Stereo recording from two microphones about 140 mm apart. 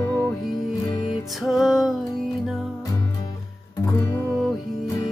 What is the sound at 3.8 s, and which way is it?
Music, 25° left (ahead or behind).